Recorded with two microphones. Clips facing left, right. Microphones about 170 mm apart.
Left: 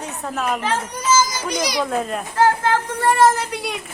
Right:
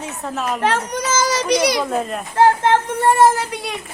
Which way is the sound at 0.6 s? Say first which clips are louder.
Right 4 dB; 75° right (ahead or behind).